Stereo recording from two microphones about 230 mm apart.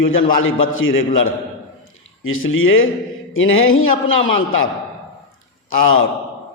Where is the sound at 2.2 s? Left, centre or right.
Left.